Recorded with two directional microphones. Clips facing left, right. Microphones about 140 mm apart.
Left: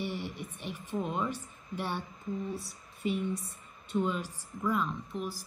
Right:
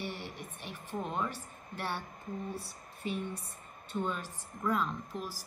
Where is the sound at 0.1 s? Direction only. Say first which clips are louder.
Left 4 dB; 45° right (ahead or behind).